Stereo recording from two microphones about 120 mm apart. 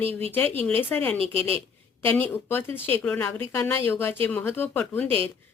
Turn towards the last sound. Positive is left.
turn(degrees=-50)  # may be behind; listen again after turning